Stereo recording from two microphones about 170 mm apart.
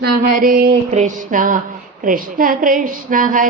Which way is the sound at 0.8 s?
45° right (ahead or behind).